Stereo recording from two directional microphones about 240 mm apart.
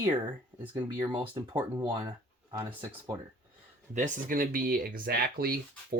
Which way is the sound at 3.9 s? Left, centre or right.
Right.